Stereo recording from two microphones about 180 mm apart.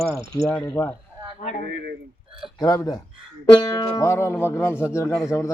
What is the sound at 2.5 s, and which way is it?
Speech, 20° left (ahead or behind).